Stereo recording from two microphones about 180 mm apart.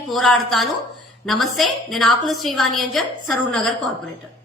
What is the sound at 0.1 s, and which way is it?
A woman's voice, centre (ahead or behind).